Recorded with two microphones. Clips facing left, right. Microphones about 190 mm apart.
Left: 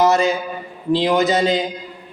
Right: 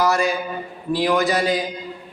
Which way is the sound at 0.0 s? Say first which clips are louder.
Left 4 dB; 20° left (ahead or behind).